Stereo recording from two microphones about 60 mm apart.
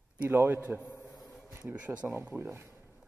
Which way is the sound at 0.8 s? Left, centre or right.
Left.